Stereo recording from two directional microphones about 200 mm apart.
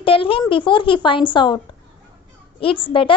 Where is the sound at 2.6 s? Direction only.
25° left (ahead or behind).